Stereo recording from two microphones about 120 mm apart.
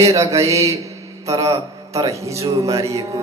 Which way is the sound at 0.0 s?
25° right (ahead or behind).